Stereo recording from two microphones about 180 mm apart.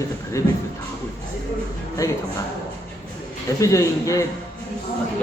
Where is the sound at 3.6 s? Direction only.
20° left (ahead or behind).